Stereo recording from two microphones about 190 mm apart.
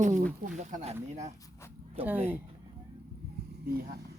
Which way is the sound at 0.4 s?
40° right (ahead or behind).